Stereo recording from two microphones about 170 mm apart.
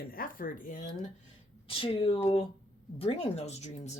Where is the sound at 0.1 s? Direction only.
55° left (ahead or behind).